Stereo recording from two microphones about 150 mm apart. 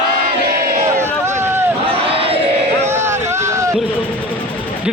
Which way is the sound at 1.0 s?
15° right (ahead or behind).